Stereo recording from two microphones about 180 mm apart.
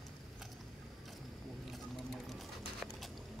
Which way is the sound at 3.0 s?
Centre (ahead or behind).